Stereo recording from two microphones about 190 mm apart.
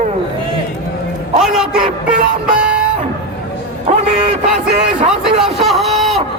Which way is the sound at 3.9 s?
35° right (ahead or behind).